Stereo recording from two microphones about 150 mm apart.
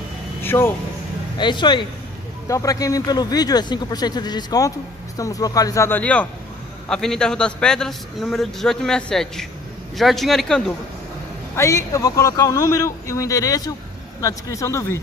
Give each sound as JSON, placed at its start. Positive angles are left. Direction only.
{"t": 0.4, "sound": "speech", "side_deg": 15}
{"t": 1.4, "sound": "a man's voice", "side_deg": 30}
{"t": 11.5, "sound": "speech", "side_deg": 20}